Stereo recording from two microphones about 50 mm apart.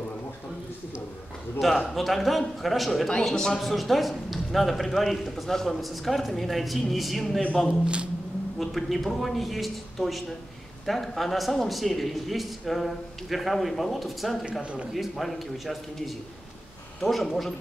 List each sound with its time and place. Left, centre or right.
1.6 s a man's voice: centre
7.8 s a man's voice: right
8.5 s a man's voice: centre
14.6 s a man's voice: right
14.9 s a man's voice: centre